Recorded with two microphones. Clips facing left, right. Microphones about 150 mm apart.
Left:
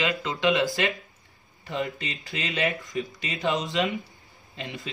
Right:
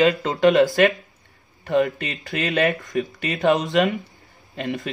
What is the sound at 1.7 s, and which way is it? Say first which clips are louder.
Speech: right 10 dB; 60° right (ahead or behind).